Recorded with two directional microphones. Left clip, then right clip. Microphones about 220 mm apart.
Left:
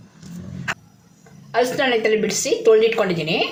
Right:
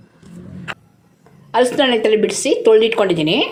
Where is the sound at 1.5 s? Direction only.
30° right (ahead or behind).